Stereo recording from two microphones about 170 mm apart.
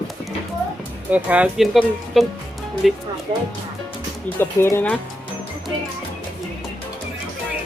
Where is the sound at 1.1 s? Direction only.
10° right (ahead or behind).